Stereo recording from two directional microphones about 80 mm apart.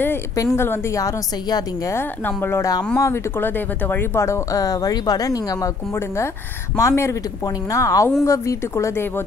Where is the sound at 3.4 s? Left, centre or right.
Left.